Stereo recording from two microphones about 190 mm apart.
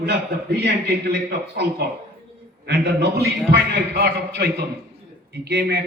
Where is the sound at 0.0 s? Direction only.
60° right (ahead or behind).